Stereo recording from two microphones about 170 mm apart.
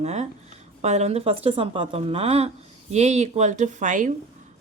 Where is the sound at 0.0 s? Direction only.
40° right (ahead or behind).